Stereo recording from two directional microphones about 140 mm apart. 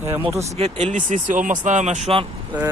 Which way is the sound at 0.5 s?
55° right (ahead or behind).